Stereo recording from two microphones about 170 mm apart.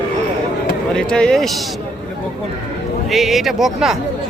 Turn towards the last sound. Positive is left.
turn(degrees=0)  # may be behind; listen again after turning